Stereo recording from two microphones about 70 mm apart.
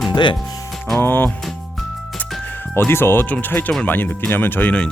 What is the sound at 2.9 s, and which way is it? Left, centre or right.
Speech, left.